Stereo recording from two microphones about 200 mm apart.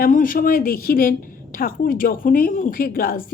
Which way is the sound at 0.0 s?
45° left (ahead or behind).